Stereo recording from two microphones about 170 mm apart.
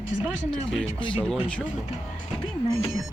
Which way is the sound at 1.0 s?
30° left (ahead or behind).